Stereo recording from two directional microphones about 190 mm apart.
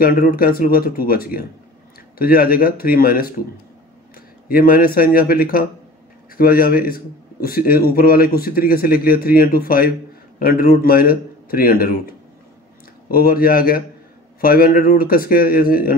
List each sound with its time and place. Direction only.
0.0 s a man's voice: 50° left (ahead or behind)
4.5 s a man's voice: 50° left (ahead or behind)
13.1 s a man's voice: 50° left (ahead or behind)